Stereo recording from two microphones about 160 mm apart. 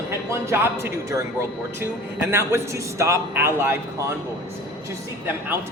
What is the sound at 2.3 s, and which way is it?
Speech, 15° right (ahead or behind).